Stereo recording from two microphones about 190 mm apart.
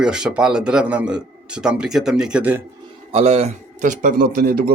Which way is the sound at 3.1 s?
30° right (ahead or behind).